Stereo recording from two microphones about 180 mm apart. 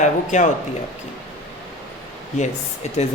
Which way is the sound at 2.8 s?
40° left (ahead or behind).